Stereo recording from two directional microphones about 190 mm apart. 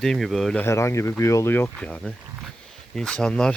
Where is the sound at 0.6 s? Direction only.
15° left (ahead or behind).